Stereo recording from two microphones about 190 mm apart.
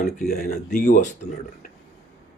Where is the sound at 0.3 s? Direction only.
45° left (ahead or behind).